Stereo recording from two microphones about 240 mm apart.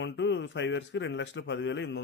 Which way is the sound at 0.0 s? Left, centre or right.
Left.